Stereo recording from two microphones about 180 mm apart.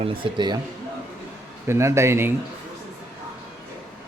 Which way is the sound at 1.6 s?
15° right (ahead or behind).